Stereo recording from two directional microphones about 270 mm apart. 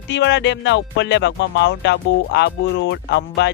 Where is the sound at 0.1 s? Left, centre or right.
Left.